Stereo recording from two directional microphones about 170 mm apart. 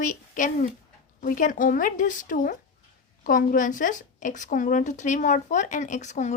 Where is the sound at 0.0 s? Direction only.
50° left (ahead or behind).